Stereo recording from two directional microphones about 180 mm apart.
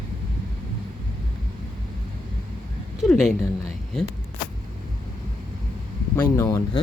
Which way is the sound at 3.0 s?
Centre (ahead or behind).